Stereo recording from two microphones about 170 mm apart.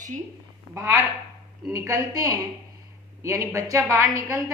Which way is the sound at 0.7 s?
15° right (ahead or behind).